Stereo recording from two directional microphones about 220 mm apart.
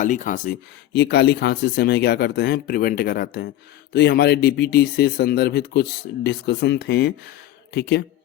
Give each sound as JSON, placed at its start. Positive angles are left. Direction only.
{"t": 0.0, "sound": "speech", "side_deg": 35}